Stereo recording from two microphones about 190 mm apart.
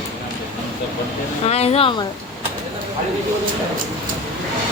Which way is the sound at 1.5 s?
35° left (ahead or behind).